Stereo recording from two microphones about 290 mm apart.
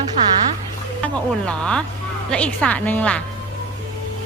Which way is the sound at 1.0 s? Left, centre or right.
Centre.